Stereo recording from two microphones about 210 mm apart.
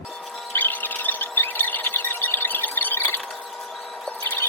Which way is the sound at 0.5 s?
10° left (ahead or behind).